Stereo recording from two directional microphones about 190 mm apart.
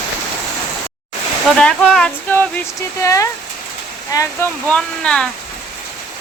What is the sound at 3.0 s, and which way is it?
Speech, 15° left (ahead or behind).